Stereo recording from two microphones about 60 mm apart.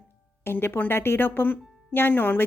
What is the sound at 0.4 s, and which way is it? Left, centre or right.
A woman's voice, left.